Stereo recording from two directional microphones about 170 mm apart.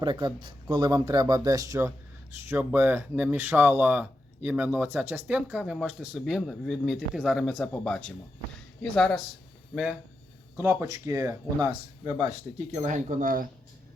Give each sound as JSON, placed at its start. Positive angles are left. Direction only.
{"t": 0.0, "sound": "speech", "side_deg": -25}
{"t": 10.6, "sound": "speech", "side_deg": -15}
{"t": 12.2, "sound": "speech", "side_deg": -40}